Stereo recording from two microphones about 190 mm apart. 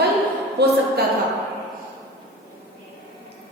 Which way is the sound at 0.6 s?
60° right (ahead or behind).